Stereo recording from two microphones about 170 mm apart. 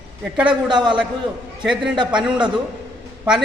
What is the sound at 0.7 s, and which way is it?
Speech, 25° right (ahead or behind).